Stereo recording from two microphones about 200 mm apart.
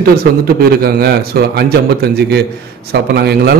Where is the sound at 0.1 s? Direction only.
50° right (ahead or behind).